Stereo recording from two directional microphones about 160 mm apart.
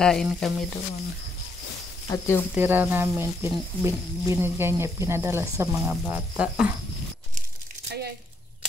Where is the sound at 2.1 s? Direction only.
15° left (ahead or behind).